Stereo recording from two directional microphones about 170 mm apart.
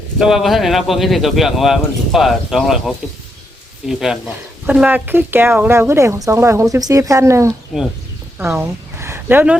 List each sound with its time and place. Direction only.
0.2 s speech: centre (ahead or behind)
7.7 s speech: centre (ahead or behind)
8.4 s speech: 15° right (ahead or behind)